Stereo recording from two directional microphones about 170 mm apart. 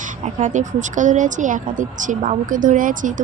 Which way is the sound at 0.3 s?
45° right (ahead or behind).